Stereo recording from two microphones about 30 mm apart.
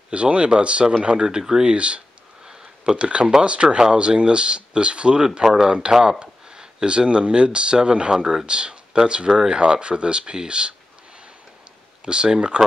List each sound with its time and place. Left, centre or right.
0.1 s speech: right
1.2 s speech: right
1.6 s speech: right
12.0 s speech: right